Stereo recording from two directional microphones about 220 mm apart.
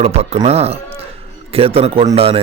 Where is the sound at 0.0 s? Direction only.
30° right (ahead or behind).